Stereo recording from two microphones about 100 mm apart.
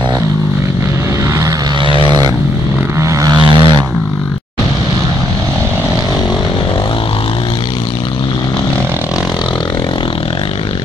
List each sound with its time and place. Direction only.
1.9 s vehicle: 55° right (ahead or behind)
3.0 s vehicle: 30° right (ahead or behind)
3.3 s vehicle: 55° right (ahead or behind)